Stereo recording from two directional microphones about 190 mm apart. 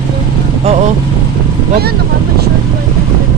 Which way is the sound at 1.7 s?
55° right (ahead or behind).